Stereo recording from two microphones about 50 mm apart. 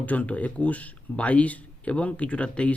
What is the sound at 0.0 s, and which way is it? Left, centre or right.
Speech, left.